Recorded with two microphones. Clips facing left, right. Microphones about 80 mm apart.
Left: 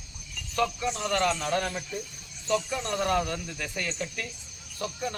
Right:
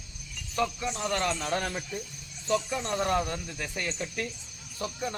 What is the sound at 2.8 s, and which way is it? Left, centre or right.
Speech, right.